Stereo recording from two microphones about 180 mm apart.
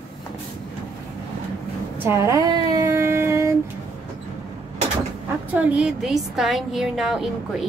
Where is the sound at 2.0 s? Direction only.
15° right (ahead or behind).